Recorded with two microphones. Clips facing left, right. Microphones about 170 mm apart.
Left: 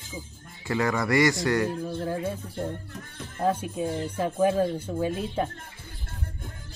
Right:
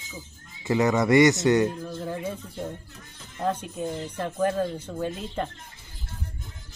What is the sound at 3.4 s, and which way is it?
Speech, 10° left (ahead or behind).